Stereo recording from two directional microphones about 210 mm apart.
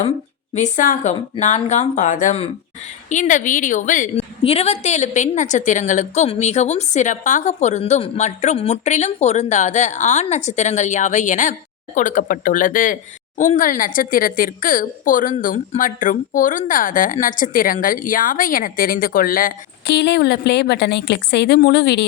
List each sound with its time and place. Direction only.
0.5 s speech: 35° left (ahead or behind); by 22.0 s 50° left (ahead or behind)